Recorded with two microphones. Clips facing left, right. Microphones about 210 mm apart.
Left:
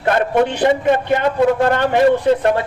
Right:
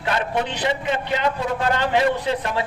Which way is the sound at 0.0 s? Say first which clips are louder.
Left 8 dB; 55° left (ahead or behind).